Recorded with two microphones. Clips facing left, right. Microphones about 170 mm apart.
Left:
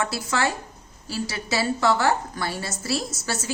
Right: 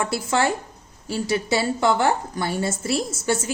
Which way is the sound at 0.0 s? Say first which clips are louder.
Right 3 dB; 25° right (ahead or behind).